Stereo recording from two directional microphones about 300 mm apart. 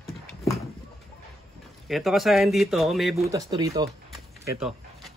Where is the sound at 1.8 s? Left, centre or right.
Centre.